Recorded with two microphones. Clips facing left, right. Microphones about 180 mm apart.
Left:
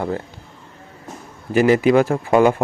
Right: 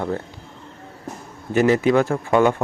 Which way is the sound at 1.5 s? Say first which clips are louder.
Left 2 dB; 10° left (ahead or behind).